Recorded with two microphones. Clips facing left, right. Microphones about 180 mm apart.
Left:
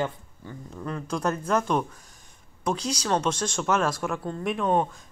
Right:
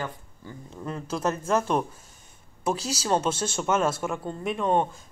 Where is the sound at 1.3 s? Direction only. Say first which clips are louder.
Right 1 dB; 30° right (ahead or behind).